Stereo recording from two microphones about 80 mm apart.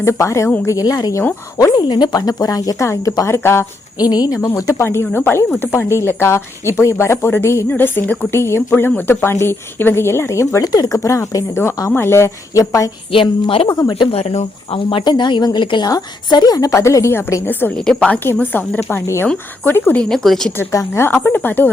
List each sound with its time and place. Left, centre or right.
0.0 s a woman's voice: left
1.7 s a woman's voice: left
3.9 s speech: left
4.4 s a woman's voice: left
7.7 s speech: left
8.3 s a woman's voice: left
10.6 s a woman's voice: left
14.8 s speech: left
16.3 s a woman's voice: left
17.7 s a woman's voice: centre
18.8 s a woman's voice: left
19.6 s speech: left
20.0 s speech: centre
20.7 s speech: left